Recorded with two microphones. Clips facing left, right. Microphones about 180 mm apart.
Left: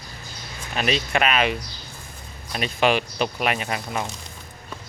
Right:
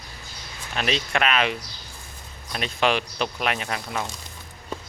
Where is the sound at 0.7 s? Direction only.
5° left (ahead or behind).